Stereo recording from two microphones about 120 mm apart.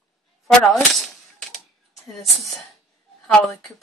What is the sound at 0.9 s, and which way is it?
Cap gun, centre (ahead or behind).